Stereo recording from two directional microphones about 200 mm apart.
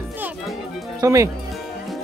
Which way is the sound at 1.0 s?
15° right (ahead or behind).